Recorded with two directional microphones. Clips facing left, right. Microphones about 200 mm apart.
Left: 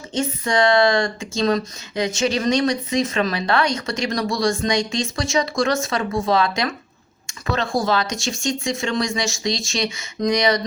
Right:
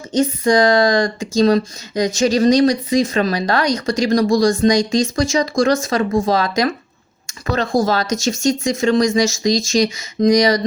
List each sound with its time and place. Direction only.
0.1 s speech: 35° right (ahead or behind)